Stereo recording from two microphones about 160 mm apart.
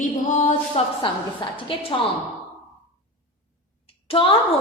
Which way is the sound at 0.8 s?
40° left (ahead or behind).